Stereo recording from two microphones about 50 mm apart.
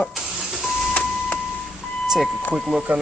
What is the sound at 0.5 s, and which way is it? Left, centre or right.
Printer, centre.